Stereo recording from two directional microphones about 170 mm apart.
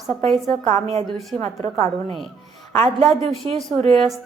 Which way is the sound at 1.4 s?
35° right (ahead or behind).